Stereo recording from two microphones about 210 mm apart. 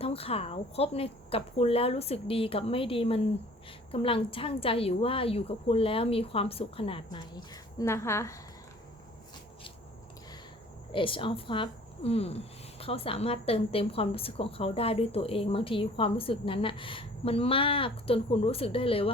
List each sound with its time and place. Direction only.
0.0 s a woman's voice: 25° left (ahead or behind)
10.9 s a woman's voice: 25° left (ahead or behind)